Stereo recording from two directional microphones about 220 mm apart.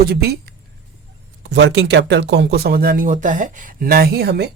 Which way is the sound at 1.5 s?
55° right (ahead or behind).